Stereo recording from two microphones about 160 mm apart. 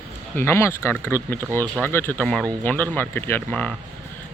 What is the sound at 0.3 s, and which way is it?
Speech, 15° left (ahead or behind).